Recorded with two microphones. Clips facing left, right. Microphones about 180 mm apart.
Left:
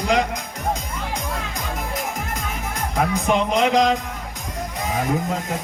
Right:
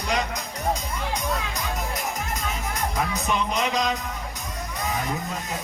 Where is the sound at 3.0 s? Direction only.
60° left (ahead or behind).